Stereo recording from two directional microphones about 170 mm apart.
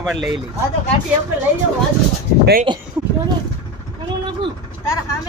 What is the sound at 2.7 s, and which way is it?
Speech, 30° right (ahead or behind).